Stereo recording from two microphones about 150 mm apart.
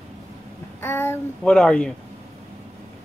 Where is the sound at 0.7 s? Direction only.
15° left (ahead or behind).